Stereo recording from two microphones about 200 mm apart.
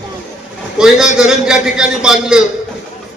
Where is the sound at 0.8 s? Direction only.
5° right (ahead or behind).